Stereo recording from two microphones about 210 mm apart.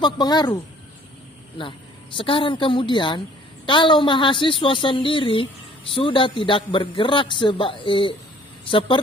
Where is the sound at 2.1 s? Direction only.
25° left (ahead or behind).